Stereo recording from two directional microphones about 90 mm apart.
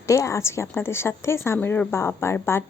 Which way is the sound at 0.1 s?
35° left (ahead or behind).